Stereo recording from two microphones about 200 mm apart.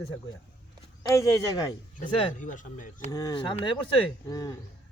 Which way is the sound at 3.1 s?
20° left (ahead or behind).